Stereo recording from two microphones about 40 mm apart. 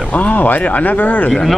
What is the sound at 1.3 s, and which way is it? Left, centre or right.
Speech, centre.